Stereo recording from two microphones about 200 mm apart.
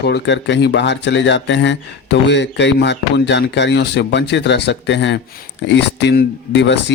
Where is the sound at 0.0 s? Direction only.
60° left (ahead or behind).